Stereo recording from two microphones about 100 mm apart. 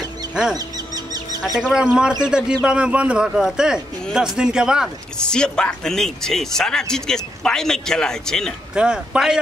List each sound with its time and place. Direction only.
0.3 s speech: 5° right (ahead or behind)
0.6 s a sound: 40° right (ahead or behind)
1.7 s speech: 5° right (ahead or behind)
5.2 s speech: 10° left (ahead or behind)
8.7 s speech: 10° right (ahead or behind)